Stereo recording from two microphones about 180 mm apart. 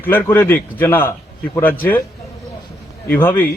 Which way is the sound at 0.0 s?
10° left (ahead or behind).